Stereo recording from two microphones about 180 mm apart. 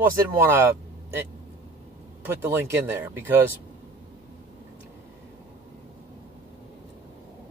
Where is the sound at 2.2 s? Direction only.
15° right (ahead or behind).